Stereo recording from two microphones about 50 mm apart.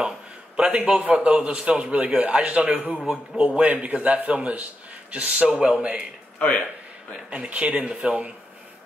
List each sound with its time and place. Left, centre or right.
0.6 s a man's voice: right
7.2 s a man's voice: right